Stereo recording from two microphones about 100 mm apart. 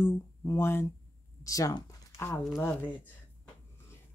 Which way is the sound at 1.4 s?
35° left (ahead or behind).